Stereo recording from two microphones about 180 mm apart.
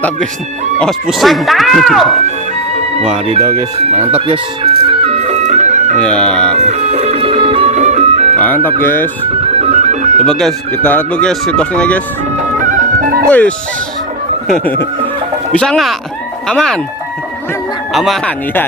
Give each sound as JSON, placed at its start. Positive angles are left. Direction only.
{"t": 0.8, "sound": "speech", "side_deg": 0}
{"t": 3.9, "sound": "speech", "side_deg": -35}
{"t": 4.9, "sound": "music", "side_deg": -35}
{"t": 6.0, "sound": "speech", "side_deg": 5}
{"t": 6.6, "sound": "music", "side_deg": -40}
{"t": 8.4, "sound": "speech", "side_deg": 10}
{"t": 9.4, "sound": "music", "side_deg": -35}
{"t": 10.2, "sound": "speech", "side_deg": 0}
{"t": 12.4, "sound": "music", "side_deg": -45}
{"t": 14.4, "sound": "speech", "side_deg": 5}
{"t": 17.9, "sound": "speech", "side_deg": 0}